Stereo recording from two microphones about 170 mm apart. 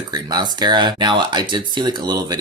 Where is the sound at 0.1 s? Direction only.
25° right (ahead or behind).